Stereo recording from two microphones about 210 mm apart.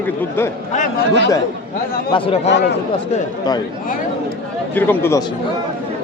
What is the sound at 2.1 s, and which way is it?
Speech, 25° left (ahead or behind).